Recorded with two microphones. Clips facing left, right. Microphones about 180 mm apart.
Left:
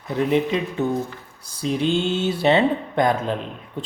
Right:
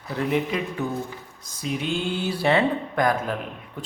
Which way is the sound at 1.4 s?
30° left (ahead or behind).